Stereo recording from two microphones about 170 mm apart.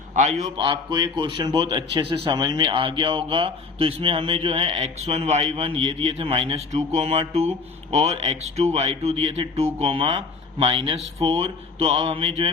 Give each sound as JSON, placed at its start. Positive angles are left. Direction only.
{"t": 0.1, "sound": "a man's voice", "side_deg": -45}
{"t": 0.5, "sound": "speech", "side_deg": -30}